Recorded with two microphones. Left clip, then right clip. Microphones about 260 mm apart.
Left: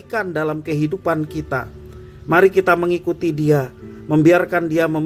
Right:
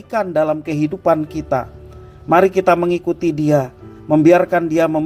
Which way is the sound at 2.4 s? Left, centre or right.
Centre.